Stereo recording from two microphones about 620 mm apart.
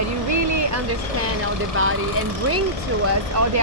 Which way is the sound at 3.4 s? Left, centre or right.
Right.